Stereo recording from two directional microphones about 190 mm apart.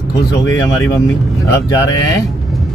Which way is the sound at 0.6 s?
15° left (ahead or behind).